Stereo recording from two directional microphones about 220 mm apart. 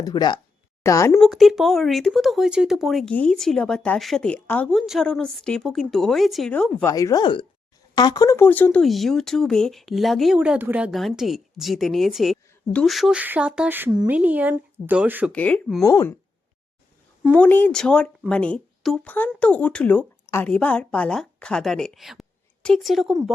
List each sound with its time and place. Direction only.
0.0 s speech: 20° left (ahead or behind)
1.2 s speech: centre (ahead or behind)
6.8 s speech: 15° left (ahead or behind); by 15.3 s 5° right (ahead or behind)
15.3 s speech: 5° left (ahead or behind)
17.3 s a woman's voice: 5° left (ahead or behind)